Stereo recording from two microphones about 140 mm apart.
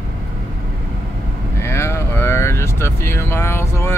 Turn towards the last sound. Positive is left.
turn(degrees=20)  # may be behind; listen again after turning